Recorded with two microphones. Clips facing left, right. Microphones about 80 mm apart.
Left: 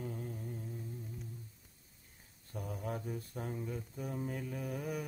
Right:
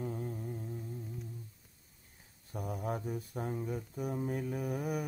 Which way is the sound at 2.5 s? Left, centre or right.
Centre.